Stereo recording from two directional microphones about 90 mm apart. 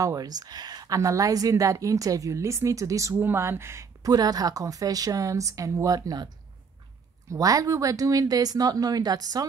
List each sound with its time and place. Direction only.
0.0 s a woman's voice: 45° right (ahead or behind)
4.1 s speech: 45° right (ahead or behind)